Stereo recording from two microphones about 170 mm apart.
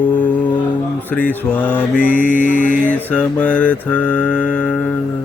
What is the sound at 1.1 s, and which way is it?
Mantra, 10° left (ahead or behind).